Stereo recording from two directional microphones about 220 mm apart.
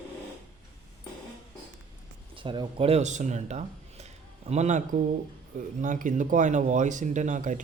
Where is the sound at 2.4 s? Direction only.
20° right (ahead or behind).